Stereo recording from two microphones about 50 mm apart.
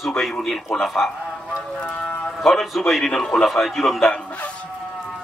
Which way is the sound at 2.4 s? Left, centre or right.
Centre.